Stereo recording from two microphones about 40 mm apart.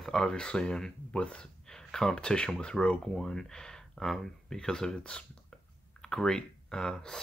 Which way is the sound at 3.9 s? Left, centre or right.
Centre.